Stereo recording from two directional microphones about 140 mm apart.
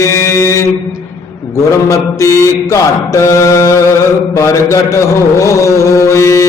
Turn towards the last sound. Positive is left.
turn(degrees=20)  # may be behind; listen again after turning